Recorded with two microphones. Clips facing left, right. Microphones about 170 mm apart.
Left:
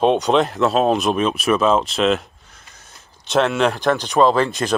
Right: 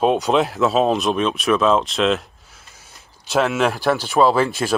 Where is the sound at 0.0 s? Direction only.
Centre (ahead or behind).